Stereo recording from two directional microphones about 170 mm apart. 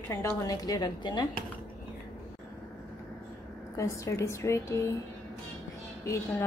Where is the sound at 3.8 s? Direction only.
20° left (ahead or behind).